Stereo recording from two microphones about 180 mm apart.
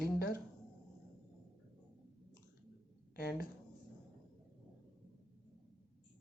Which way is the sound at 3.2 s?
60° left (ahead or behind).